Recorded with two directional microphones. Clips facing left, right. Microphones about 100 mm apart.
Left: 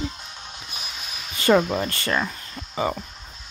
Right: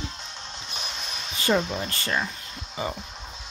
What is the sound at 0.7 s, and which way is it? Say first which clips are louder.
Music: right 3 dB; 5° left (ahead or behind).